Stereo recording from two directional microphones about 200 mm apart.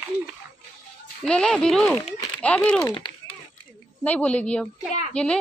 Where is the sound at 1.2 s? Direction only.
5° left (ahead or behind).